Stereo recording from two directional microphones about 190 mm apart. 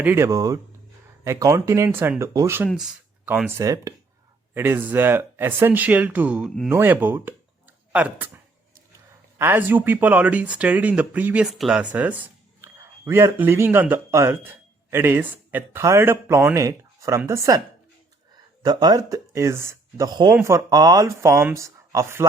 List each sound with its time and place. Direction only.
0.0 s speech: 10° right (ahead or behind)
2.6 s speech: centre (ahead or behind)
9.4 s speech: 10° right (ahead or behind)
18.6 s speech: 20° right (ahead or behind)